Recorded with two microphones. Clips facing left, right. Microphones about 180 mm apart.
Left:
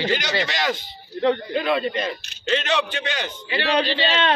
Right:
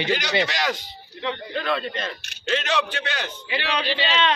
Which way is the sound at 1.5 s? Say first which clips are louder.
Left 4 dB; 10° left (ahead or behind).